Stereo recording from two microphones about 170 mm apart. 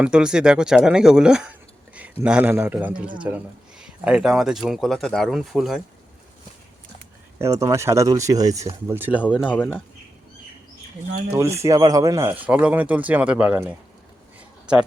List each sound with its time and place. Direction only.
0.0 s speech: 5° right (ahead or behind)
7.3 s speech: 15° right (ahead or behind)
9.5 s speech: 10° left (ahead or behind)
11.3 s speech: 15° right (ahead or behind)